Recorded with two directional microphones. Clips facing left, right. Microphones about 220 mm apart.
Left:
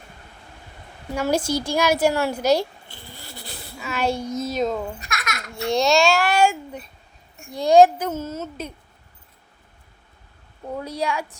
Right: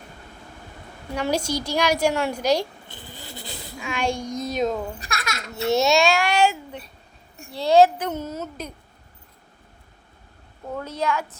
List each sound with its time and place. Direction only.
1.1 s a child's voice: 5° left (ahead or behind)
2.9 s a sound: 20° right (ahead or behind)
3.8 s a child's voice: 5° left (ahead or behind)
4.9 s a child's voice: 30° right (ahead or behind)
5.6 s a child's voice: 5° right (ahead or behind)
7.6 s a child's voice: 15° left (ahead or behind)
10.8 s a child's voice: 10° left (ahead or behind)